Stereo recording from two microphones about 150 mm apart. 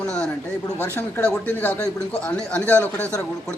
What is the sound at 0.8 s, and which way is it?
A man's voice, 15° left (ahead or behind).